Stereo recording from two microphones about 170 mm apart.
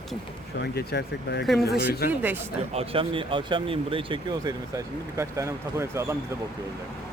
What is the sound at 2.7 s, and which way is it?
Speech, 35° right (ahead or behind).